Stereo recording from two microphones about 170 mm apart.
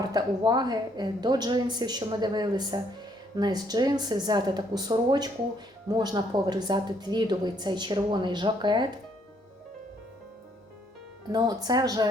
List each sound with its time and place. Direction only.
0.0 s a woman's voice: 20° right (ahead or behind)
11.3 s a woman's voice: 25° right (ahead or behind)